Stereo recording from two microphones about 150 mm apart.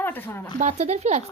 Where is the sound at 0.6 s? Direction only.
50° right (ahead or behind).